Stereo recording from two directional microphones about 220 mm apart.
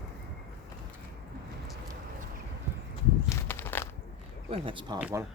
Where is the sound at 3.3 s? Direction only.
10° left (ahead or behind).